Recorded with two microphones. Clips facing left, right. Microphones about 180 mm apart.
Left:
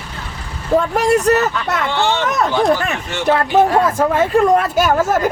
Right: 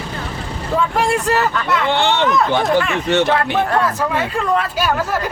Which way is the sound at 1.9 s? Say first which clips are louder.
Right 1 dB; 60° right (ahead or behind).